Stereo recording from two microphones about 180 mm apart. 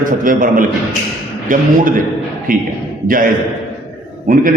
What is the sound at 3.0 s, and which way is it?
Speech, 50° right (ahead or behind).